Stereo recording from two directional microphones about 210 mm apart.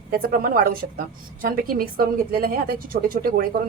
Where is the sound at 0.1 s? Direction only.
45° right (ahead or behind).